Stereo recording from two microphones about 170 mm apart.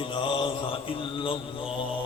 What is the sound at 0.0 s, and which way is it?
Mantra, 30° left (ahead or behind).